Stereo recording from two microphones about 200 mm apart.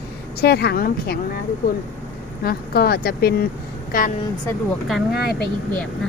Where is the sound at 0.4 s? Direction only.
55° left (ahead or behind).